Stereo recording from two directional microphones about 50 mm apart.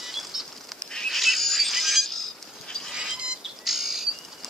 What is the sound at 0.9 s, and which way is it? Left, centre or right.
Bird, centre.